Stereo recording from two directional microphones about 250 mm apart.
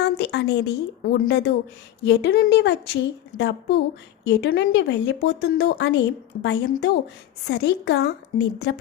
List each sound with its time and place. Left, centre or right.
0.0 s a woman's voice: left